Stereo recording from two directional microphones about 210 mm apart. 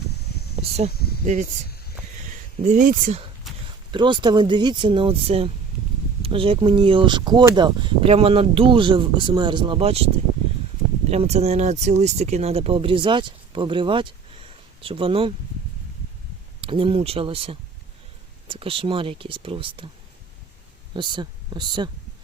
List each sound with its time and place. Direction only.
0.5 s a sound: 30° right (ahead or behind)
0.9 s speech: 50° left (ahead or behind)
1.2 s speech: 35° right (ahead or behind)
2.6 s speech: 40° right (ahead or behind)
3.5 s a sound: centre (ahead or behind)
3.9 s speech: 20° right (ahead or behind)
11.1 s speech: 30° right (ahead or behind)
16.6 s speech: 25° right (ahead or behind)
20.9 s speech: 20° right (ahead or behind)